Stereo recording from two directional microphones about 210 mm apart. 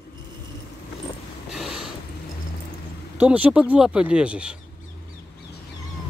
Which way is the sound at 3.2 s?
5° right (ahead or behind).